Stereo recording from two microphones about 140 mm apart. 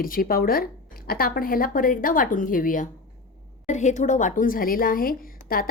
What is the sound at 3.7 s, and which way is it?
A woman's voice, 60° left (ahead or behind).